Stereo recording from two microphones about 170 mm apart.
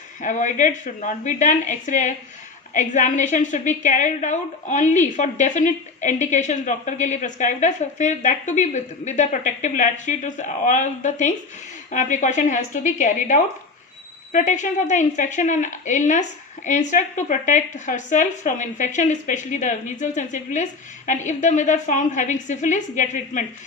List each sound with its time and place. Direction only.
0.2 s a woman's voice: 50° left (ahead or behind)